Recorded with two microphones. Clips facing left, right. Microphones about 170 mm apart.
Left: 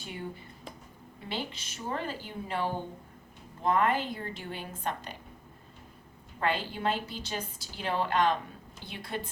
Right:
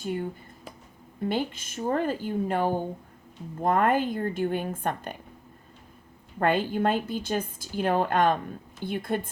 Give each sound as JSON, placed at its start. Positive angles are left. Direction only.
{"t": 0.0, "sound": "a woman's voice", "side_deg": -45}
{"t": 1.3, "sound": "a woman's voice", "side_deg": -50}
{"t": 6.4, "sound": "a woman's voice", "side_deg": -50}